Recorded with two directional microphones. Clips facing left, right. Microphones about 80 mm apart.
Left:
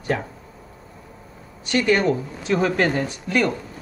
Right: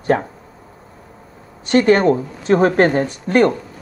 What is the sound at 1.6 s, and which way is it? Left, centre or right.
Speech, right.